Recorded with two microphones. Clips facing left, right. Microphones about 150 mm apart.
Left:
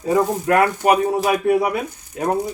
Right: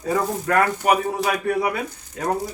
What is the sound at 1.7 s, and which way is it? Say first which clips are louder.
Speech: left 4 dB; 20° left (ahead or behind).